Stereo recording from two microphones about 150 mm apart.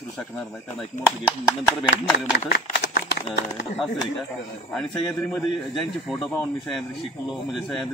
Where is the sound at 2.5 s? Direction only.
60° left (ahead or behind).